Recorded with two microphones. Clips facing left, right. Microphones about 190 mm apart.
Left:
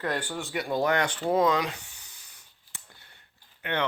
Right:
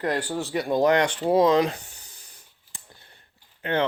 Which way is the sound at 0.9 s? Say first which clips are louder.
Right 5 dB; 30° right (ahead or behind).